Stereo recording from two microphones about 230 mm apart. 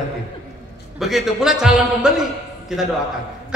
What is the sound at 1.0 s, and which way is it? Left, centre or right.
A man's voice, centre.